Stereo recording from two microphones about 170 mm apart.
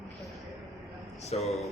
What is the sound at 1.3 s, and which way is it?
Speech, 40° left (ahead or behind).